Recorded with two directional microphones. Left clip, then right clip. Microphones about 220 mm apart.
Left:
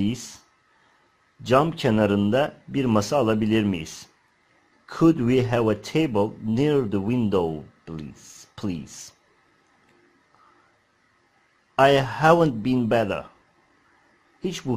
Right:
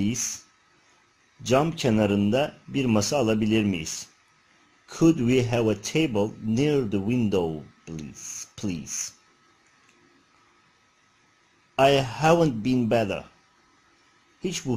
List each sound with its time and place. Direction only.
0.1 s speech: 25° right (ahead or behind)
1.5 s speech: centre (ahead or behind)
3.8 s speech: 25° right (ahead or behind)
4.8 s speech: centre (ahead or behind)
8.2 s a sound: 25° right (ahead or behind)
8.5 s speech: centre (ahead or behind)
11.7 s speech: centre (ahead or behind)
14.4 s a man's voice: centre (ahead or behind)